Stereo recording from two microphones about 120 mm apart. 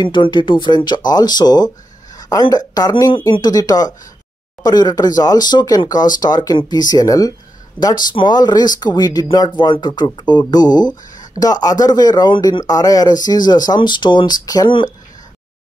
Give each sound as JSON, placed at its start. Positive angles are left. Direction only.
{"t": 0.0, "sound": "speech", "side_deg": 40}